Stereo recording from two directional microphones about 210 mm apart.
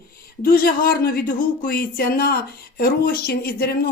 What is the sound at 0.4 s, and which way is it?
Speech, 45° left (ahead or behind).